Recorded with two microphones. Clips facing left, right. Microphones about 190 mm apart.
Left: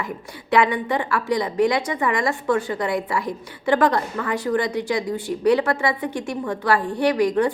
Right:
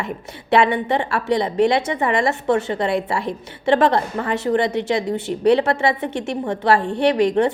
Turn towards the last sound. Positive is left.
turn(degrees=-25)  # may be behind; listen again after turning